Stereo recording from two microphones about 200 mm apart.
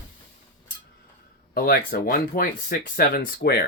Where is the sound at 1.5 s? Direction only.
50° left (ahead or behind).